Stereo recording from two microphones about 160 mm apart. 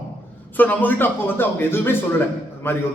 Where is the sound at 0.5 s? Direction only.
10° left (ahead or behind).